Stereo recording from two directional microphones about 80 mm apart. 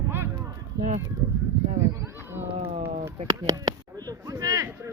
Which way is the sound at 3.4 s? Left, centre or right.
Right.